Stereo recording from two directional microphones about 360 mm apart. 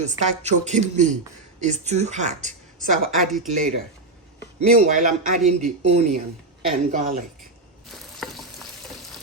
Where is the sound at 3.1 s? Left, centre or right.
Centre.